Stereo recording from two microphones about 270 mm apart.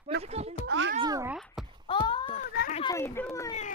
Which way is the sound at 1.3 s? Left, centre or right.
Centre.